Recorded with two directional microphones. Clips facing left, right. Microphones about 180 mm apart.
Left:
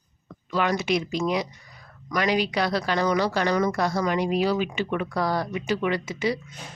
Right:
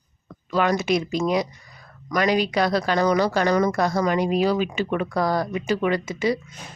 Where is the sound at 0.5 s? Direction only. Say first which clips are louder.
Right 3 dB; 45° right (ahead or behind).